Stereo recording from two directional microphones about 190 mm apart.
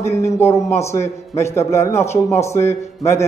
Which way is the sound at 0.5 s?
35° left (ahead or behind).